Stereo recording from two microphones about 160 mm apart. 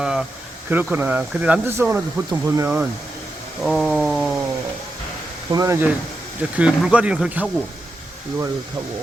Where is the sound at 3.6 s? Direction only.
Centre (ahead or behind).